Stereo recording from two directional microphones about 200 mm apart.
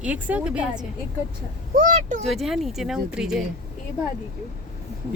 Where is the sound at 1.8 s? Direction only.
40° right (ahead or behind).